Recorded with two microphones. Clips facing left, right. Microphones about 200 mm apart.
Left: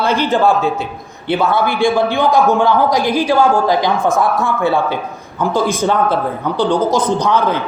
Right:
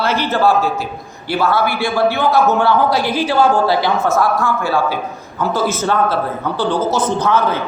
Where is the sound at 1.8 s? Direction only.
15° left (ahead or behind).